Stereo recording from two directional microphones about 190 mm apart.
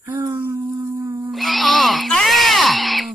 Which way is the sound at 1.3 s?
Centre (ahead or behind).